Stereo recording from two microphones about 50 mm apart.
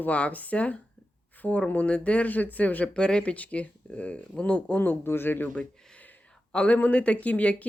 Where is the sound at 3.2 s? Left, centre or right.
Left.